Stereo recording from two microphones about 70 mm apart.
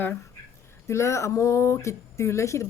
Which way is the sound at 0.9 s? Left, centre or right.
Left.